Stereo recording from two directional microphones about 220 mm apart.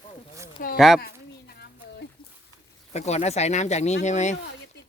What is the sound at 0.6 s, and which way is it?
Speech, 40° left (ahead or behind).